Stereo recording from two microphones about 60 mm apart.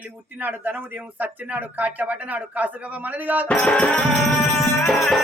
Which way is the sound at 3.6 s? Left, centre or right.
Centre.